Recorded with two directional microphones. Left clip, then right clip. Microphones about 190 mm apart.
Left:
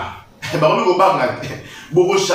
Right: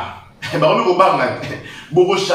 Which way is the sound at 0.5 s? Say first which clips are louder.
Even; 5° right (ahead or behind).